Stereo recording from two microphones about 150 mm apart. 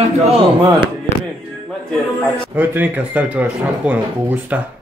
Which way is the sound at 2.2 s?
10° right (ahead or behind).